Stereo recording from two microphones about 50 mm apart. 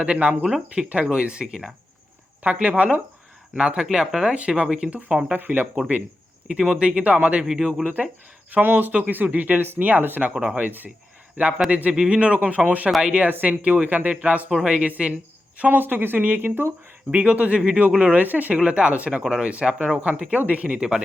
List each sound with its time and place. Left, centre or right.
0.0 s speech: right
3.9 s speech: centre
4.4 s speech: right
6.5 s speech: centre
7.4 s speech: centre
7.9 s speech: right
13.0 s speech: centre
13.2 s speech: right
15.8 s speech: right
18.5 s speech: right